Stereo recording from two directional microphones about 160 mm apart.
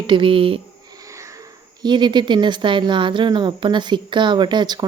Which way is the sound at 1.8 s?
30° right (ahead or behind).